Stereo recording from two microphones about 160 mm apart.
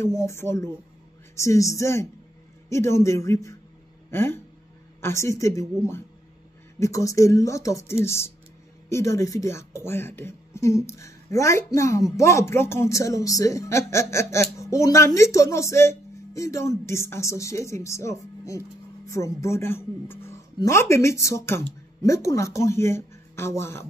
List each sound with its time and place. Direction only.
0.0 s speech: 20° left (ahead or behind)
6.8 s speech: 20° left (ahead or behind)